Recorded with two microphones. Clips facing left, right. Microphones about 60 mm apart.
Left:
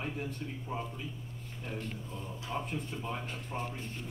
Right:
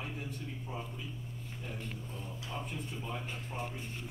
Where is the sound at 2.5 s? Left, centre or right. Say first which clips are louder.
Left 4 dB; left.